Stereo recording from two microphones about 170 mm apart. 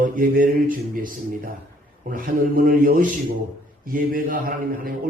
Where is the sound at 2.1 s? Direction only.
55° right (ahead or behind).